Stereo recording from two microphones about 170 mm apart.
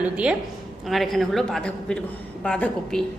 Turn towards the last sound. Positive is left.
turn(degrees=5)  # may be behind; listen again after turning